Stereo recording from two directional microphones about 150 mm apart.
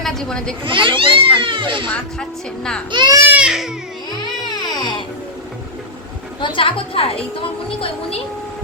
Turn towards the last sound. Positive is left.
turn(degrees=35)  # may be behind; listen again after turning